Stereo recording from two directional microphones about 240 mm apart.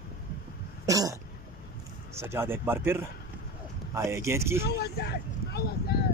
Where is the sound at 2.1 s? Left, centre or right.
Centre.